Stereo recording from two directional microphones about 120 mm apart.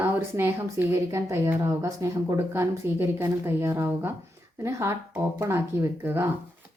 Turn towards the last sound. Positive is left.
turn(degrees=-20)  # may be behind; listen again after turning